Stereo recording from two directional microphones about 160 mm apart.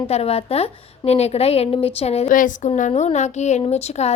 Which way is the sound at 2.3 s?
55° left (ahead or behind).